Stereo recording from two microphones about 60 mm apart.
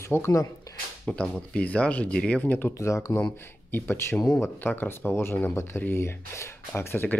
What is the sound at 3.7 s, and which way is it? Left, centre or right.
Speech, left.